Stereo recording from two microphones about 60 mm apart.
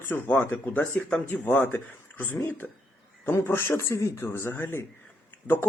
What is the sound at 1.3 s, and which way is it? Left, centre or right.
Speech, left.